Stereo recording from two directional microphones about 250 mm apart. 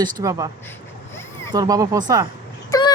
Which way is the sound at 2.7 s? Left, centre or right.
Centre.